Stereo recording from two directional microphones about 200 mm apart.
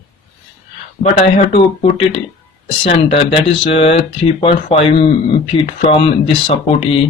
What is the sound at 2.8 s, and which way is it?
Speech, 30° left (ahead or behind).